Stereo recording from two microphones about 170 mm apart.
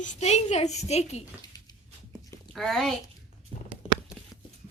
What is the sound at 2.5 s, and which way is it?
Speech, centre (ahead or behind).